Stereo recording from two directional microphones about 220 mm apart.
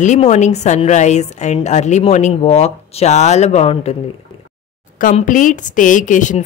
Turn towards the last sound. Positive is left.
turn(degrees=35)  # may be behind; listen again after turning